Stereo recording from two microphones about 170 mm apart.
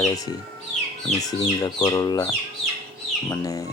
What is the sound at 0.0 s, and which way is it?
Speech, 20° left (ahead or behind).